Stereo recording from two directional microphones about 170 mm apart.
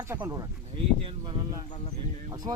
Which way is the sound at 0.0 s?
15° right (ahead or behind).